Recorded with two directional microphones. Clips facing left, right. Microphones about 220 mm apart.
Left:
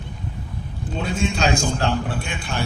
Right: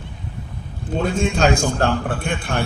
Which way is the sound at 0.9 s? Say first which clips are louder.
Right 4 dB; 50° right (ahead or behind).